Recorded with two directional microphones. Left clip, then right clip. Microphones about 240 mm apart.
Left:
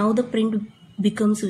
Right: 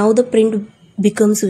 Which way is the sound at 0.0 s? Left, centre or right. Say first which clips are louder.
Right 10 dB; right.